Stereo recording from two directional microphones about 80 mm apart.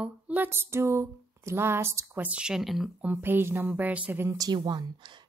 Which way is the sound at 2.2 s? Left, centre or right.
Centre.